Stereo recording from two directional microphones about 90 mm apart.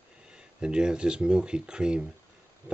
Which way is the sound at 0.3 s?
10° right (ahead or behind).